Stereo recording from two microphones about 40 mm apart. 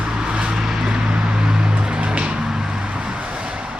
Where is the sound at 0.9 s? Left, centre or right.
Right.